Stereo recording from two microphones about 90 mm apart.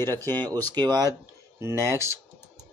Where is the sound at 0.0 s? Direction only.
25° left (ahead or behind).